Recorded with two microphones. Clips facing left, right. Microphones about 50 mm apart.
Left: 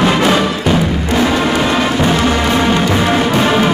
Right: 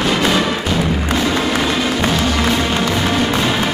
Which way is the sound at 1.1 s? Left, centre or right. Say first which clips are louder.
Left 5 dB; left.